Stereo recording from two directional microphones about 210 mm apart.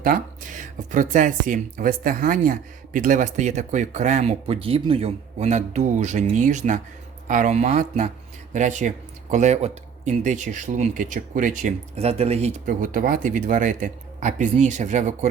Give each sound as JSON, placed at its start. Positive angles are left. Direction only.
{"t": 0.0, "sound": "speech", "side_deg": -40}